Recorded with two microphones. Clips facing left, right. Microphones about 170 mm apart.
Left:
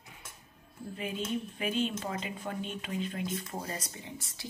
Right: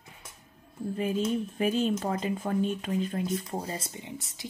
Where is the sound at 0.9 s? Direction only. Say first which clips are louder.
Right 6 dB; 40° right (ahead or behind).